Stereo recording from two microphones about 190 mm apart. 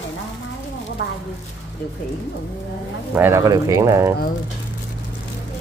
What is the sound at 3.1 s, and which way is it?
Speech, 10° right (ahead or behind).